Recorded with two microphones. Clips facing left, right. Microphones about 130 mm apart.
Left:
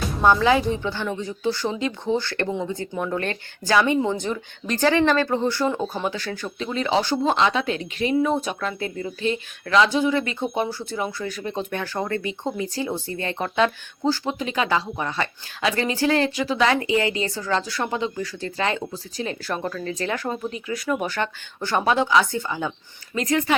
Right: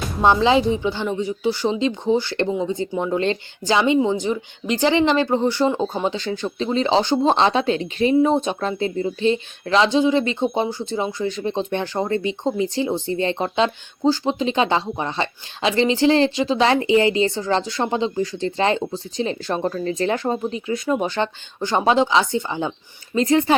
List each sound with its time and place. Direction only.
0.2 s a woman's voice: 20° right (ahead or behind)